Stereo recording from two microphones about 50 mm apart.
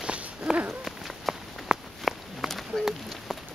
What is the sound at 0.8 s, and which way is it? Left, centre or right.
Walk, centre.